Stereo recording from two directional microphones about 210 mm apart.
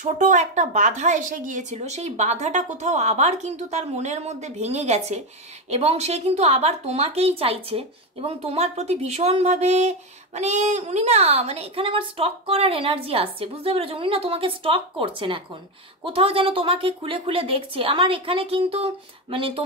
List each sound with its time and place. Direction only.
0.0 s a woman's voice: 35° right (ahead or behind)